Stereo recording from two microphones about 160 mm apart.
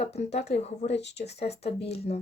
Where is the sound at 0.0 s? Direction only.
40° left (ahead or behind).